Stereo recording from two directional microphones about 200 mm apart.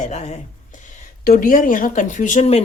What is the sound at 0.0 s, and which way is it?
Speech, 35° left (ahead or behind).